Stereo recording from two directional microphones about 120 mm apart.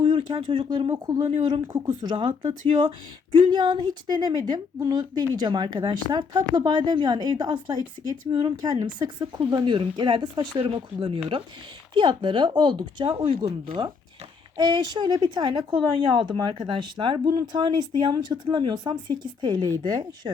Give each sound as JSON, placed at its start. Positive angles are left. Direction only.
{"t": 0.0, "sound": "speech", "side_deg": -45}
{"t": 2.0, "sound": "a woman's voice", "side_deg": -40}